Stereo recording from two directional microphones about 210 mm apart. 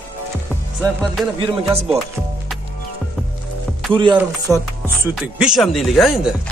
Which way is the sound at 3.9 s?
25° right (ahead or behind).